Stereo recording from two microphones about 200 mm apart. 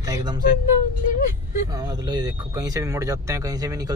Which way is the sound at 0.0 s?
20° right (ahead or behind).